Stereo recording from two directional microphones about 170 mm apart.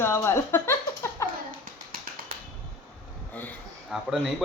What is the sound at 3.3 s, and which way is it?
Speech, 5° left (ahead or behind).